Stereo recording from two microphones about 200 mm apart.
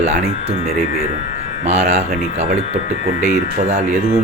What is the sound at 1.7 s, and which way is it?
Speech, 30° right (ahead or behind).